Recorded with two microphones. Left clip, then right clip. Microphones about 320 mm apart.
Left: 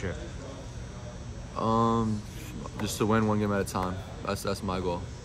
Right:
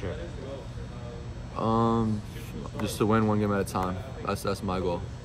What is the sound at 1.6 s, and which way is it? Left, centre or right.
Speech, centre.